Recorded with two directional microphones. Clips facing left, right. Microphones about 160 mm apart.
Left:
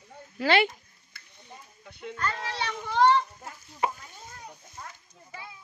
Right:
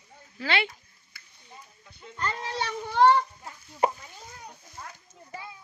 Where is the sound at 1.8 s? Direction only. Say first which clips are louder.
Left 8 dB; 65° left (ahead or behind).